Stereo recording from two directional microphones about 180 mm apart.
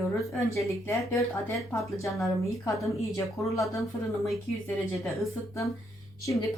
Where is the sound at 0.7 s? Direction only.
15° left (ahead or behind).